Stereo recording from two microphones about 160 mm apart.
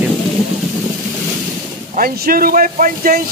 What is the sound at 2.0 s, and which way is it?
Speech, 65° right (ahead or behind).